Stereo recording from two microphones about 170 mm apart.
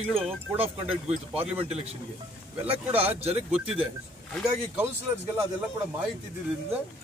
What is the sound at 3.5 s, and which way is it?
Speech, 5° right (ahead or behind).